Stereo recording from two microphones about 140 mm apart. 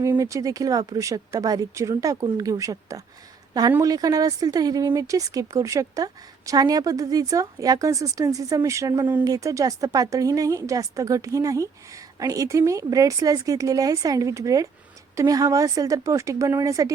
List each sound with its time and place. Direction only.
0.0 s speech: 20° right (ahead or behind)